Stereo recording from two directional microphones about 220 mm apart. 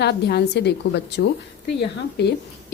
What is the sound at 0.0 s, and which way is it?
A woman's voice, 50° left (ahead or behind).